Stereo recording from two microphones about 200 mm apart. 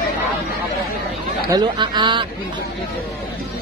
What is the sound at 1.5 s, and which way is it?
Speech, 20° right (ahead or behind).